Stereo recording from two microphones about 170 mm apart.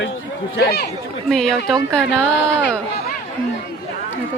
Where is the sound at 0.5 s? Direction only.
70° left (ahead or behind).